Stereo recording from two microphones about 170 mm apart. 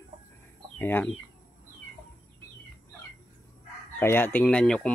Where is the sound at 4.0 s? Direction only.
10° left (ahead or behind).